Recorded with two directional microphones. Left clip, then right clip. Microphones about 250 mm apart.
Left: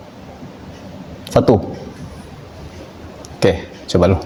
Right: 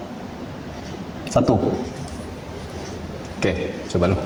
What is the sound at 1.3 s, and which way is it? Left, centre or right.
Speech, left.